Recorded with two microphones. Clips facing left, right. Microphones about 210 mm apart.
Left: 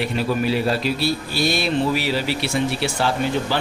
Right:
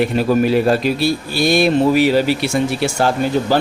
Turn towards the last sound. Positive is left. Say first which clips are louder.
# right 5 dB
turn(degrees=-45)  # may be behind; listen again after turning